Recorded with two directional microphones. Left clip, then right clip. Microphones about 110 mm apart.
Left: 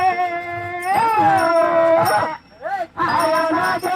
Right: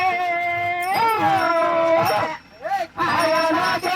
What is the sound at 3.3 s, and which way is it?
Music, 35° right (ahead or behind).